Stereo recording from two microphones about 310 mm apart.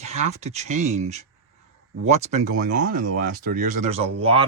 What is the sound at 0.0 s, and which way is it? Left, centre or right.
Speech, right.